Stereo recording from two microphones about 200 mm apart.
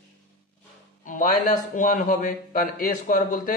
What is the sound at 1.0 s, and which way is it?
A man's voice, 40° left (ahead or behind).